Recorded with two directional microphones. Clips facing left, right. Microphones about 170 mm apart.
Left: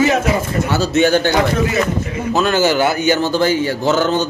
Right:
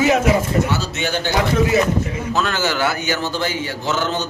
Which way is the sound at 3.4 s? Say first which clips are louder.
Left 8 dB; 40° left (ahead or behind).